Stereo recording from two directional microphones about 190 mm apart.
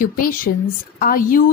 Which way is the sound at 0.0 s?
45° left (ahead or behind).